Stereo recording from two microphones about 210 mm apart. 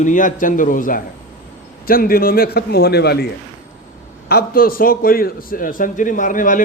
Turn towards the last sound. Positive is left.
turn(degrees=40)  # may be behind; listen again after turning